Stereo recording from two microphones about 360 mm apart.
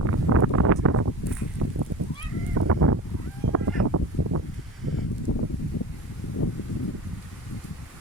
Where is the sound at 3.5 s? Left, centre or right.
Right.